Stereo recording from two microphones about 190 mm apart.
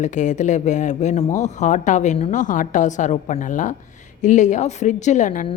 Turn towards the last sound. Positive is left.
turn(degrees=40)  # may be behind; listen again after turning